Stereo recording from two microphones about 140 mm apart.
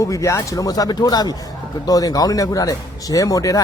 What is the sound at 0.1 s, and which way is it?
Speech, 20° left (ahead or behind).